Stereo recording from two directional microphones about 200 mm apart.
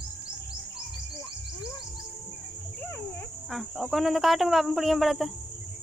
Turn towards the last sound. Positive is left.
turn(degrees=0)  # may be behind; listen again after turning